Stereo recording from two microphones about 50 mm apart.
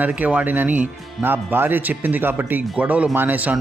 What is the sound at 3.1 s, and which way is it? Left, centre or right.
Speech, right.